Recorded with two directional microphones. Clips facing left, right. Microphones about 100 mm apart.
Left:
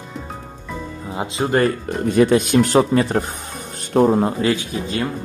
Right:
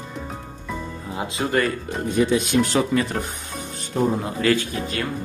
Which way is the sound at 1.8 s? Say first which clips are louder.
Left 5 dB; 60° left (ahead or behind).